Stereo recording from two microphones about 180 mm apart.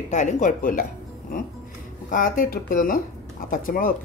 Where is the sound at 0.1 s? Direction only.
40° left (ahead or behind).